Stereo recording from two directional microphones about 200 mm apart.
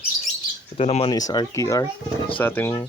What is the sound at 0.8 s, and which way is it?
Speech, 30° left (ahead or behind).